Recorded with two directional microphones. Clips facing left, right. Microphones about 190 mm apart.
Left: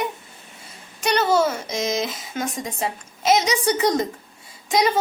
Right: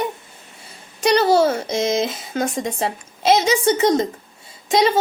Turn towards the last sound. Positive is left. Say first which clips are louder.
# right 3 dB
turn(degrees=-25)  # may be behind; listen again after turning